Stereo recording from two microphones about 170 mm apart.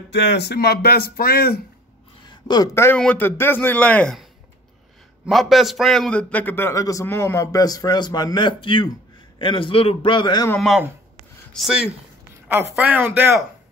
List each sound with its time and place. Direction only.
0.1 s speech: 85° left; by 1.6 s 65° left (ahead or behind)
2.2 s a man's voice: 25° left (ahead or behind)
10.5 s speech: centre (ahead or behind)
12.4 s speech: 15° right (ahead or behind)